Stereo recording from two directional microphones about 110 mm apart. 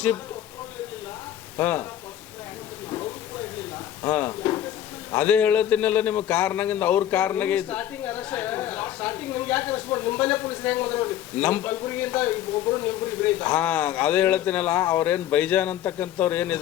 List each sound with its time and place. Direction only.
1.5 s a man's voice: 15° left (ahead or behind)
4.0 s a man's voice: 15° left (ahead or behind)